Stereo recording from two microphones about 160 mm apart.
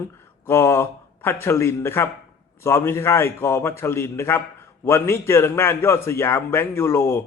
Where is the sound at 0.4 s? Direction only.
15° left (ahead or behind).